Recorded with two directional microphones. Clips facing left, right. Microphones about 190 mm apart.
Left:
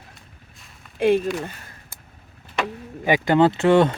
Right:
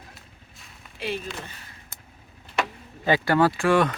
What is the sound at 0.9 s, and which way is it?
Speech, 50° left (ahead or behind).